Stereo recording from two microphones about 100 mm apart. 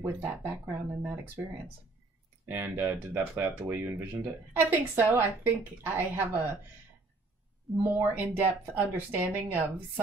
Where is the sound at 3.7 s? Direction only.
20° right (ahead or behind).